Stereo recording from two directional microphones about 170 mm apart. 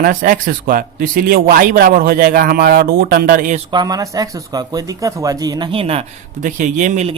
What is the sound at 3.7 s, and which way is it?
Speech, 25° right (ahead or behind).